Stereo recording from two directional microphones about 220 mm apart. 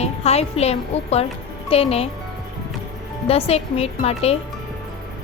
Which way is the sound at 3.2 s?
25° left (ahead or behind).